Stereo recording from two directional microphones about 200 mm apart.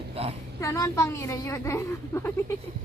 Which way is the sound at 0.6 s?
15° left (ahead or behind).